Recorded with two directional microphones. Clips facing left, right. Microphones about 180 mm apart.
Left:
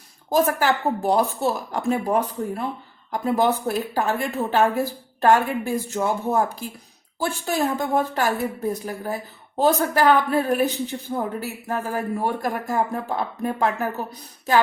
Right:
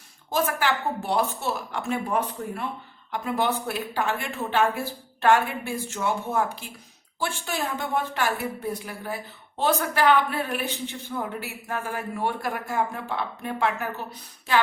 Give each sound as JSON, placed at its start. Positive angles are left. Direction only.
{"t": 0.3, "sound": "a woman's voice", "side_deg": 40}